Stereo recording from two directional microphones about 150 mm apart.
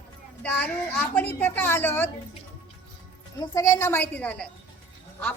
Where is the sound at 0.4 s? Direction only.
10° left (ahead or behind).